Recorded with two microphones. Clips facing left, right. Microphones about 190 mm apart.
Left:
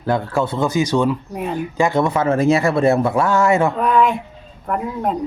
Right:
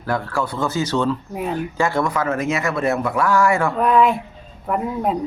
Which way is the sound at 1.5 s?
15° left (ahead or behind).